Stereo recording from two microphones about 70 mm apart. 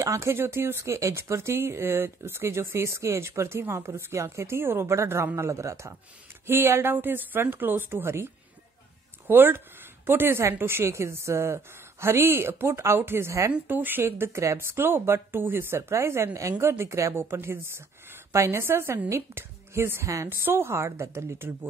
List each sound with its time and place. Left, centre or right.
0.0 s speech: right
9.3 s speech: right
13.7 s speech: right
14.7 s speech: right
20.2 s speech: right